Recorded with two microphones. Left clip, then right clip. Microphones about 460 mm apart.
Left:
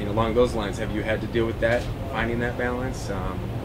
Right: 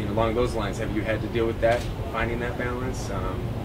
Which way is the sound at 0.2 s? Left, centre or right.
Left.